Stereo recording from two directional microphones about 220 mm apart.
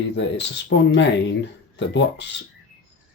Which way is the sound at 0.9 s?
55° left (ahead or behind).